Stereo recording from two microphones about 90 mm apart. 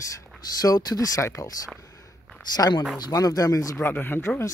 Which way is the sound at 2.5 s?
50° left (ahead or behind).